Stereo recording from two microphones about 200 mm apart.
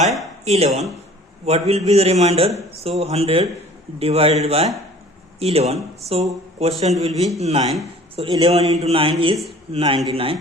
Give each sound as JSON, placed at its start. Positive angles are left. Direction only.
{"t": 0.4, "sound": "a man's voice", "side_deg": -30}